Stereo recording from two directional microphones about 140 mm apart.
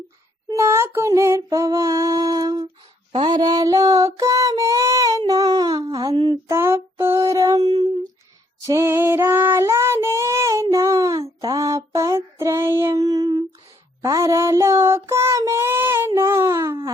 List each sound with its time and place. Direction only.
0.4 s child singing: 20° right (ahead or behind)
6.5 s child singing: 20° right (ahead or behind)